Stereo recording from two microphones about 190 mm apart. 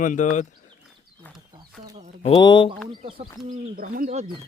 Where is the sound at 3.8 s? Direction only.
50° right (ahead or behind).